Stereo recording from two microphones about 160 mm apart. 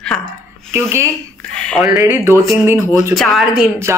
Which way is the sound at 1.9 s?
15° right (ahead or behind).